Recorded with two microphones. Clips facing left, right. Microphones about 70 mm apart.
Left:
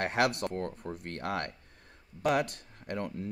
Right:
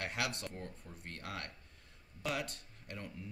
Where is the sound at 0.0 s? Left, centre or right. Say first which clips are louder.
Left 11 dB; left.